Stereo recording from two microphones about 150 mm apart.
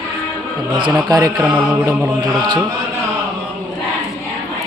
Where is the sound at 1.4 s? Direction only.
10° right (ahead or behind).